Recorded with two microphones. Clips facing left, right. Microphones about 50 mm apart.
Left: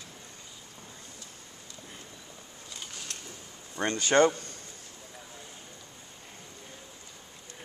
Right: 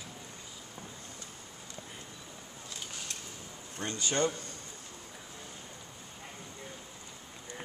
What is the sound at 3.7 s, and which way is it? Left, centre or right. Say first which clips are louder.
Speech: left 9 dB; left.